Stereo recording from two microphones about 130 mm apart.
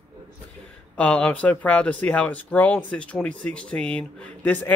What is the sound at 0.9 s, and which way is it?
Speech, 10° left (ahead or behind).